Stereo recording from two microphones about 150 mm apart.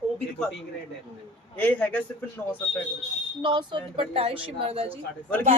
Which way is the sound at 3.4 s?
30° right (ahead or behind).